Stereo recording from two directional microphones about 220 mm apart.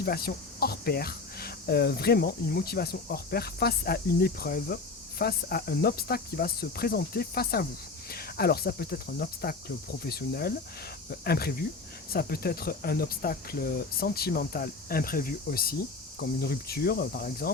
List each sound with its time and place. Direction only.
0.0 s speech: 45° left (ahead or behind)